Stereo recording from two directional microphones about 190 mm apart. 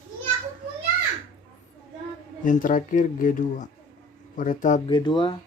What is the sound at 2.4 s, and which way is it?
Speech, 45° left (ahead or behind).